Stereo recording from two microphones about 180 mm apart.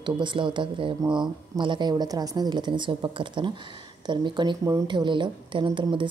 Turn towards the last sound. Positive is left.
turn(degrees=-25)  # may be behind; listen again after turning